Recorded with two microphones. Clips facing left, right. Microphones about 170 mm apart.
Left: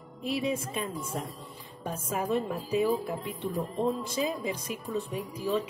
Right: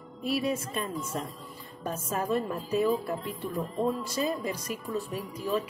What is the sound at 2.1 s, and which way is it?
Speech, 15° left (ahead or behind).